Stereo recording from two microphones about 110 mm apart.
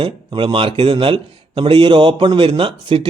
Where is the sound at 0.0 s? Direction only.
50° right (ahead or behind).